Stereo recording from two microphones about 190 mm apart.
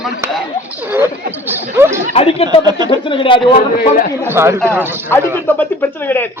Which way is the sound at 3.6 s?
40° left (ahead or behind).